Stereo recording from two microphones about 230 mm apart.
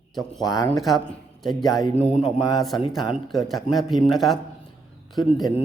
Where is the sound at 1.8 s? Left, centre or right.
Left.